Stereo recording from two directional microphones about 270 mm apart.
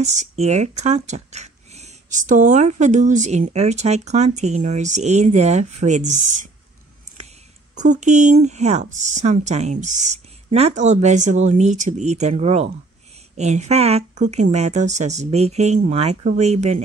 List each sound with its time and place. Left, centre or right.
0.0 s speech: right
7.7 s speech: right